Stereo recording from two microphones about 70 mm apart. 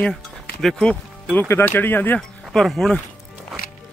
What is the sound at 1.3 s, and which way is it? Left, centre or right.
Speech, left.